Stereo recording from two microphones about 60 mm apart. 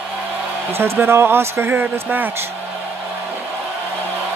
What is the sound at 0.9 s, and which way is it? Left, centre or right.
Speech, right.